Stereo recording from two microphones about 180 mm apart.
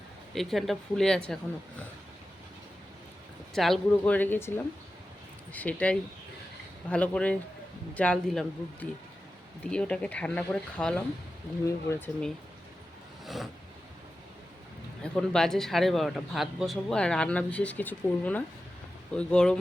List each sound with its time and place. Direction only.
0.3 s a man's voice: centre (ahead or behind)
3.5 s a man's voice: centre (ahead or behind)
13.2 s a sound: centre (ahead or behind)
15.0 s a man's voice: 5° left (ahead or behind)